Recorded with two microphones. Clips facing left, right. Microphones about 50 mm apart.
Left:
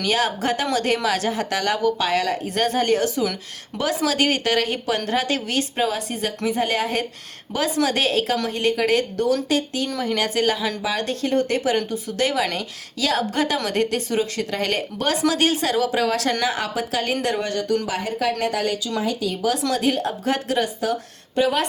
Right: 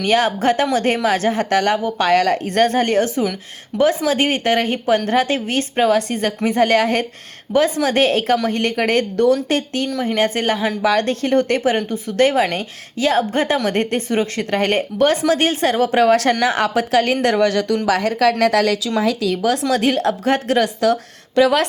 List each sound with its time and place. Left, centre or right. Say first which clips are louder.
0.0 s speech: right 5 dB; right
7.5 s speech: right 5 dB; right
17.2 s speech: right 7 dB; right
17.8 s speech: right 8 dB; right
19.0 s speech: right 6 dB; right
19.7 s a woman's voice: right 5 dB; right